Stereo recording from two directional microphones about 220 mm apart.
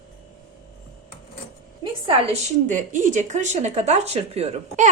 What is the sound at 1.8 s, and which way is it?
A woman's voice, 25° right (ahead or behind).